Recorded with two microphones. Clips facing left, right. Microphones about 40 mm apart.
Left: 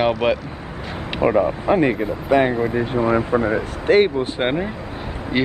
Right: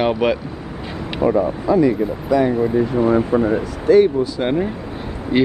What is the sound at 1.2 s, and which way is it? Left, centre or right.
Speech, left.